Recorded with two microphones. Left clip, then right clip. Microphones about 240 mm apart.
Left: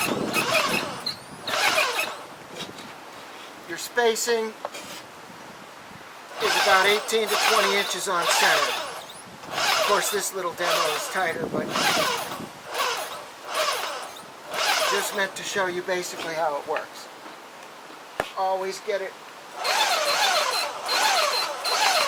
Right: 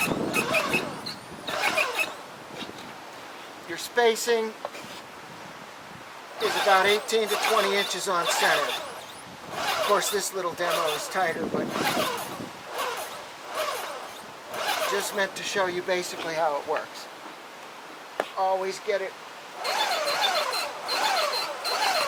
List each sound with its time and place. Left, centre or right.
0.0 s vehicle: centre
1.5 s squeal: centre
3.7 s a sound: centre
6.4 s speech: centre
9.6 s zipper: centre
10.4 s speech: centre
12.7 s zipper: centre
13.5 s a sound: centre
14.5 s speech: centre
18.3 s speech: right
18.6 s speech: centre
19.6 s a sound: centre